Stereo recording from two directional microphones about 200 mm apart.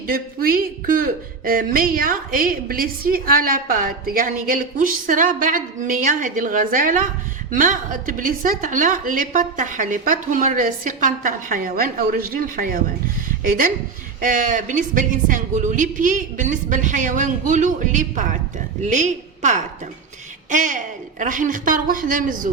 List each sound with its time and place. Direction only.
0.1 s a woman's voice: 45° right (ahead or behind)